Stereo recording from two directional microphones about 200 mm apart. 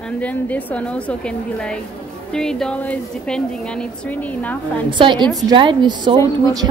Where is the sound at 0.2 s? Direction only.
5° left (ahead or behind).